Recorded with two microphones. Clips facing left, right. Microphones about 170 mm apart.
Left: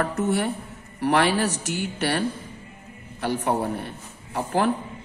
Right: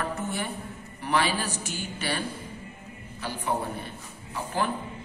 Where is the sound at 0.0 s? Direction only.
70° left (ahead or behind).